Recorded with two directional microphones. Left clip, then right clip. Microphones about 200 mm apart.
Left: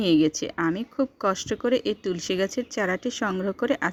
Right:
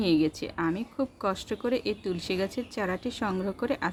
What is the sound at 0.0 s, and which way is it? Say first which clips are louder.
Speech: left 4 dB; 35° left (ahead or behind).